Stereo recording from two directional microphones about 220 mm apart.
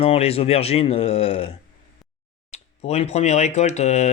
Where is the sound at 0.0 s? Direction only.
25° left (ahead or behind).